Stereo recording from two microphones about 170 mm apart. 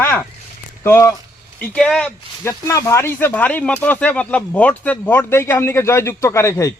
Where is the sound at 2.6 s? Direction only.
15° left (ahead or behind).